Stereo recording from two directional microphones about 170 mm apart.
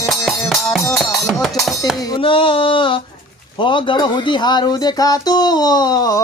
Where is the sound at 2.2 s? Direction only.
30° left (ahead or behind).